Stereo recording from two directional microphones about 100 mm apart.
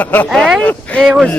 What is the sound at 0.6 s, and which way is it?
Speech, 10° left (ahead or behind).